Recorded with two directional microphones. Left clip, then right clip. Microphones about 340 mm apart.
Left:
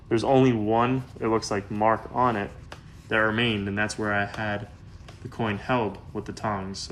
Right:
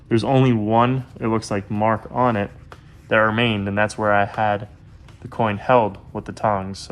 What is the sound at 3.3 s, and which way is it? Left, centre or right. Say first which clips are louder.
Speech: right 5 dB; centre.